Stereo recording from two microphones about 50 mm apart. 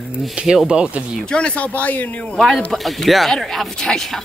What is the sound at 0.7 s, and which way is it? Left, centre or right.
Speech, centre.